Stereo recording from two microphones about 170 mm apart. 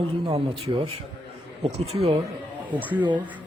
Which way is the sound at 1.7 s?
35° right (ahead or behind).